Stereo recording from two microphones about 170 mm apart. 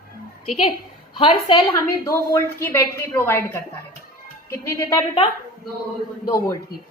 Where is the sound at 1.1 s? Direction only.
30° left (ahead or behind).